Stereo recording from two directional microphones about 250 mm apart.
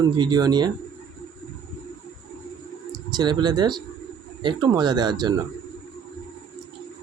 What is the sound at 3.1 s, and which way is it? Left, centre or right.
Speech, centre.